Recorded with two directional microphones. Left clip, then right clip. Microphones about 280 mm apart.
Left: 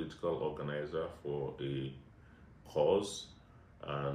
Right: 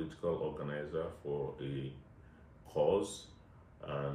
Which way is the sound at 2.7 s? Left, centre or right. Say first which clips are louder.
Left 1 dB; centre.